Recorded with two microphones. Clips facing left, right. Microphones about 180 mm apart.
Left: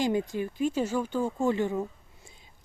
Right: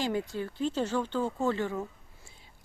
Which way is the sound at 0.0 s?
15° left (ahead or behind).